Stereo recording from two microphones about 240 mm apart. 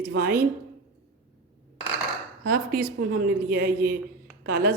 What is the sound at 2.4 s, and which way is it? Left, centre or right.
A woman's voice, right.